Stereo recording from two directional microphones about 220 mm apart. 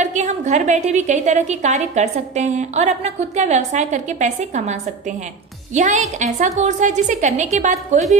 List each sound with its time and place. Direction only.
0.0 s a woman's voice: 30° right (ahead or behind)